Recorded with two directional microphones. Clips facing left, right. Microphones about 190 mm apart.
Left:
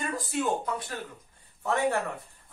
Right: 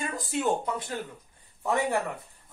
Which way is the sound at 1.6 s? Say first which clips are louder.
Even; 15° right (ahead or behind).